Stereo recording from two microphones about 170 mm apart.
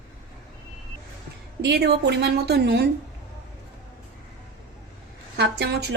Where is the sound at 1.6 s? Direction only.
75° right (ahead or behind).